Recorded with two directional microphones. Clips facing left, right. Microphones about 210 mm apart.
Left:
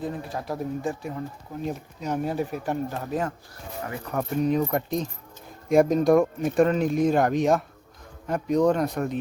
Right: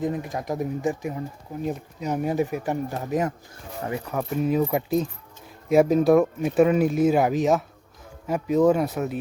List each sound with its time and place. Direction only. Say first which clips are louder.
0.0 s speech: right 4 dB; 15° right (ahead or behind)
4.1 s speech: left 1 dB; centre (ahead or behind)